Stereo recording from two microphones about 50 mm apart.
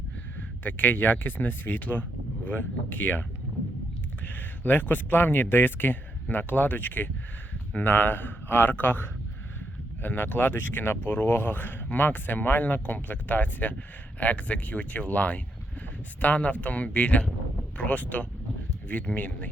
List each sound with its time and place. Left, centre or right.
0.6 s speech: left
4.3 s speech: left